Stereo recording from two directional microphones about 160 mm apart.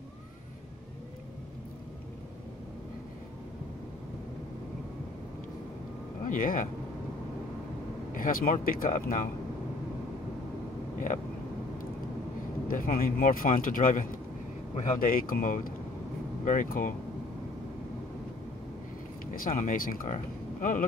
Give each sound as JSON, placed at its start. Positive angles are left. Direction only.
{"t": 6.2, "sound": "speech", "side_deg": 60}
{"t": 8.1, "sound": "speech", "side_deg": 60}
{"t": 12.6, "sound": "speech", "side_deg": 60}
{"t": 19.3, "sound": "speech", "side_deg": 60}